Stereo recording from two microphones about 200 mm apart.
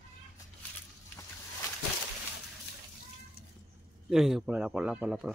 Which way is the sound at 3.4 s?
50° left (ahead or behind).